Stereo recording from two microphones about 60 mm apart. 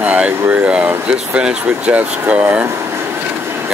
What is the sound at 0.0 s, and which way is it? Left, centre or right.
Speech, right.